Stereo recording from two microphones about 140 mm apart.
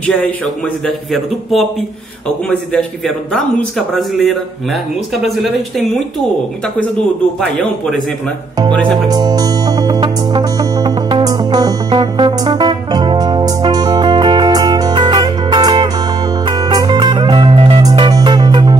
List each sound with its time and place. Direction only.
0.8 s speech: centre (ahead or behind)
3.3 s speech: centre (ahead or behind)
7.3 s speech: 5° left (ahead or behind)
9.1 s music: 30° right (ahead or behind)